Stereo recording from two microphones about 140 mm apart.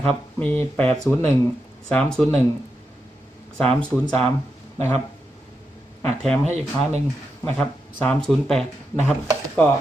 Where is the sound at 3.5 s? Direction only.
5° left (ahead or behind).